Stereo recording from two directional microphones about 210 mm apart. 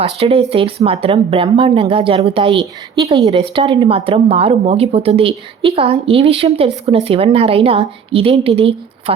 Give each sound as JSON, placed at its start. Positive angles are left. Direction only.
{"t": 0.0, "sound": "speech", "side_deg": -30}